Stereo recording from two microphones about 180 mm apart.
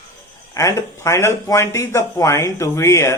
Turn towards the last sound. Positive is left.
turn(degrees=15)  # may be behind; listen again after turning